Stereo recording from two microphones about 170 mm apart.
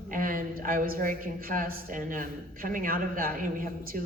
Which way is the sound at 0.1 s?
55° right (ahead or behind).